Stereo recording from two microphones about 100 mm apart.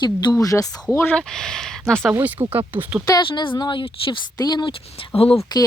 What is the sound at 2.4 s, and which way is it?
Speech, 65° right (ahead or behind).